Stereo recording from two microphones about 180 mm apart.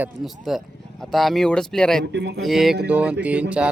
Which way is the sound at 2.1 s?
75° right (ahead or behind).